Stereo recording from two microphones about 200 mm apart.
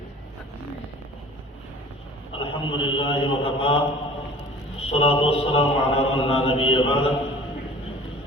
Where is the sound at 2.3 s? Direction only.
25° left (ahead or behind).